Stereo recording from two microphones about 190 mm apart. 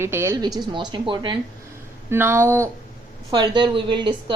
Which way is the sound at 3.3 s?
25° right (ahead or behind).